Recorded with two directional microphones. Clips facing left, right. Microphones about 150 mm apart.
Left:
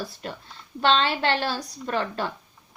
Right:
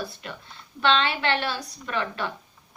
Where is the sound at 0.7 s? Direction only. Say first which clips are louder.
Left 1 dB; 40° left (ahead or behind).